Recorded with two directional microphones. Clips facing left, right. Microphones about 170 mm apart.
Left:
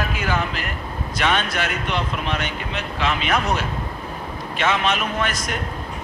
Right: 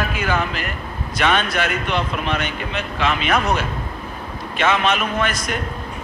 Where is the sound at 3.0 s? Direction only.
65° right (ahead or behind).